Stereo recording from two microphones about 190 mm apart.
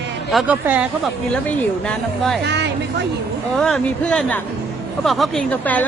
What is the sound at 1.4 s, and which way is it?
Speech, 5° left (ahead or behind).